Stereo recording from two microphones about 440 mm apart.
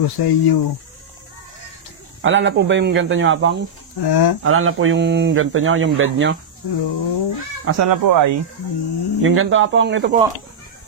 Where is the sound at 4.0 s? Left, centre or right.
Left.